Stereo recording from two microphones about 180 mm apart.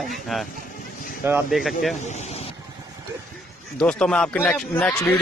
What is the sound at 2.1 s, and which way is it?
Speech, 40° left (ahead or behind).